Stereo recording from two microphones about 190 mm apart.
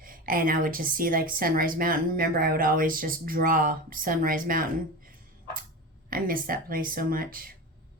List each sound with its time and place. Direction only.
0.0 s a woman's voice: 50° right (ahead or behind)
6.1 s a woman's voice: 50° right (ahead or behind)